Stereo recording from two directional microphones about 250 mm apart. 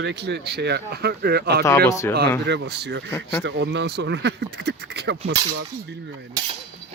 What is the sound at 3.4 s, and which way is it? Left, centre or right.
Speech, right.